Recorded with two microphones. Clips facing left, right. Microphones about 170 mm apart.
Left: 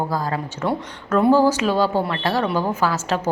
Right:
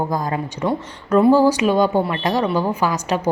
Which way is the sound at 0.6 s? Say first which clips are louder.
Right 1 dB; 5° right (ahead or behind).